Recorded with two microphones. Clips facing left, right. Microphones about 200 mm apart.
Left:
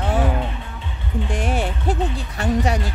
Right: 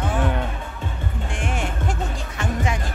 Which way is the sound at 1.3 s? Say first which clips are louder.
Left 4 dB; 35° left (ahead or behind).